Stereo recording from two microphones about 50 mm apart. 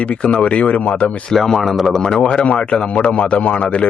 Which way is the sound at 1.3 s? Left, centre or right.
Centre.